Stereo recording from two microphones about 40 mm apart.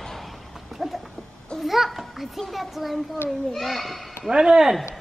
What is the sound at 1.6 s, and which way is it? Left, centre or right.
Babbling, centre.